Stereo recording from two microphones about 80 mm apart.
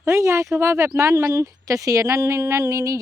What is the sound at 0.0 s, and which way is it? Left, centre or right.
Speech, right.